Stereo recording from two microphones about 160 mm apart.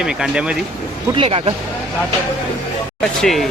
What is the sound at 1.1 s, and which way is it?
Speech, 30° right (ahead or behind).